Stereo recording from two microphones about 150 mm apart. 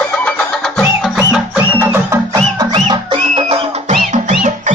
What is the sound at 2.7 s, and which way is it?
Music, 35° right (ahead or behind).